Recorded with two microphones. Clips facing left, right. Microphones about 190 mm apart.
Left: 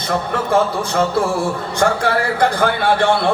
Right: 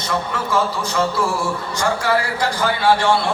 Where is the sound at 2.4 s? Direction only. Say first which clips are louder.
Left 4 dB; 55° left (ahead or behind).